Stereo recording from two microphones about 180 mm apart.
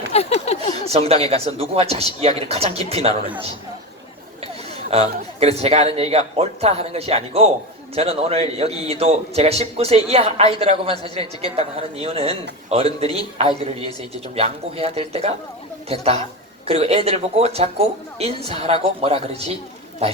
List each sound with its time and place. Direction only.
0.1 s a sound: 35° left (ahead or behind)
0.9 s a man's voice: 35° right (ahead or behind)
4.9 s a man's voice: 30° right (ahead or behind)